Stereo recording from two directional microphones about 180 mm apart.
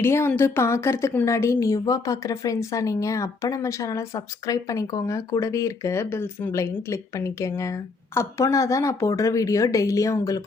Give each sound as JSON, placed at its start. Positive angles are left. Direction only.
{"t": 0.0, "sound": "a woman's voice", "side_deg": 15}